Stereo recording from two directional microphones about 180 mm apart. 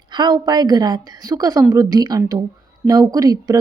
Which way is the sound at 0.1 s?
25° right (ahead or behind).